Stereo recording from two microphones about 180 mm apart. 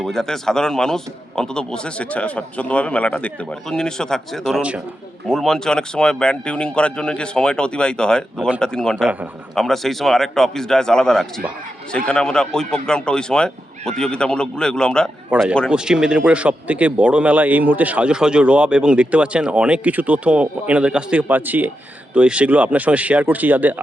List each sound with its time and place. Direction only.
0.0 s a man's voice: centre (ahead or behind)
15.3 s speech: 5° right (ahead or behind)